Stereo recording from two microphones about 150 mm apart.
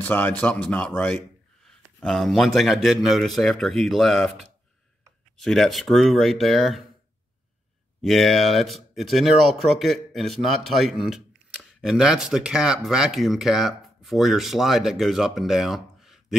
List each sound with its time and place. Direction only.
0.0 s a man's voice: 15° left (ahead or behind)
5.4 s a man's voice: centre (ahead or behind)
8.0 s a man's voice: centre (ahead or behind)